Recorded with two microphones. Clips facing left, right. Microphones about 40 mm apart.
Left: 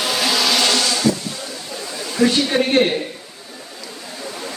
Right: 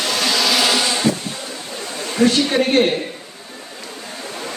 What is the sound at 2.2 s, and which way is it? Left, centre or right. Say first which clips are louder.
Speech: right 1 dB; right.